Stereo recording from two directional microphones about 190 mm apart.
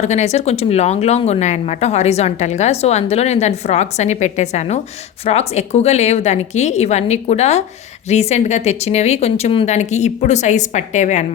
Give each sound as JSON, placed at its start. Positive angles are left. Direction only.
{"t": 0.0, "sound": "speech", "side_deg": 35}